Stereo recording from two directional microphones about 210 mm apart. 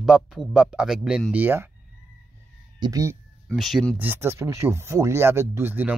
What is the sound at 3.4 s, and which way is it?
Speech, centre (ahead or behind).